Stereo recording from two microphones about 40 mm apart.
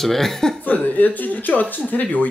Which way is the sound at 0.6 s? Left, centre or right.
Left.